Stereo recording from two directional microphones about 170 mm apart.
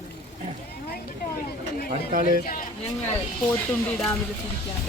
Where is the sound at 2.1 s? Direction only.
55° right (ahead or behind).